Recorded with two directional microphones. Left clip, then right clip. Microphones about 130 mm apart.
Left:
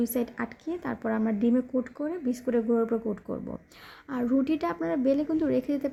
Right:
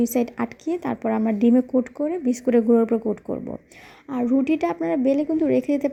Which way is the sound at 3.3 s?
20° right (ahead or behind).